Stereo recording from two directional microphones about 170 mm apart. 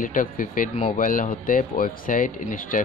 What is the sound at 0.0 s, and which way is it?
Speech, 50° left (ahead or behind).